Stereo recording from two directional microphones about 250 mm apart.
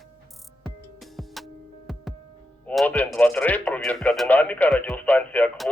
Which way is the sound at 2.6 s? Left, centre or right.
Centre.